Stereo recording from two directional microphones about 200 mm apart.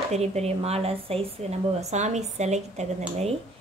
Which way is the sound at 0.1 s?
35° right (ahead or behind).